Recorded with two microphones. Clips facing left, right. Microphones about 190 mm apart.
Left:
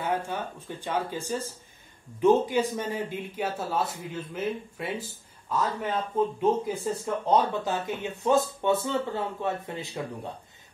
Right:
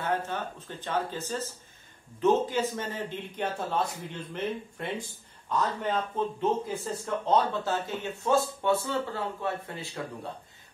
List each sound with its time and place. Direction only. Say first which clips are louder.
0.0 s speech: left 1 dB; 10° left (ahead or behind)